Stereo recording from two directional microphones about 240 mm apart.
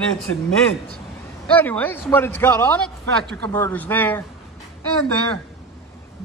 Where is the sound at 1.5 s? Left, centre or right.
Centre.